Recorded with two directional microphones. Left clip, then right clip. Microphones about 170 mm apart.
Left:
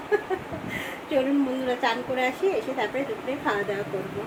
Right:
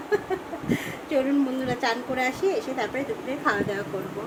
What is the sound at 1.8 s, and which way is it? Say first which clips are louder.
Speech: right 1 dB; centre (ahead or behind).